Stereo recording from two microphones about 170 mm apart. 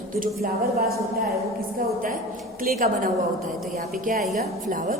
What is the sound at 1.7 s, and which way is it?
A woman's voice, 55° right (ahead or behind).